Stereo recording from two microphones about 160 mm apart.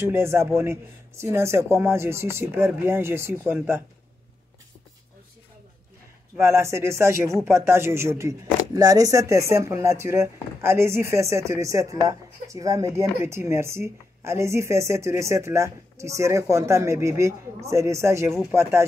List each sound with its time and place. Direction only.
0.0 s speech: 15° right (ahead or behind)
6.3 s speech: 15° right (ahead or behind)